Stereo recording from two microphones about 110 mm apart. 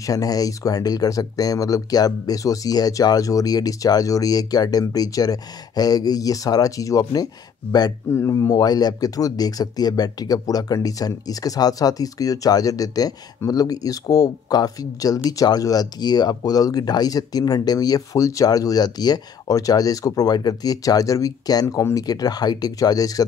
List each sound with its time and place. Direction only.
0.0 s speech: 35° left (ahead or behind)